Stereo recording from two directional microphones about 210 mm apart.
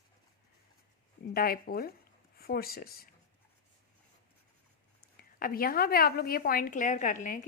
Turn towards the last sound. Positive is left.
turn(degrees=40)  # may be behind; listen again after turning